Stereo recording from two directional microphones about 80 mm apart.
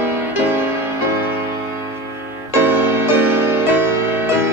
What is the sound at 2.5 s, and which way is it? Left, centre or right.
Music, right.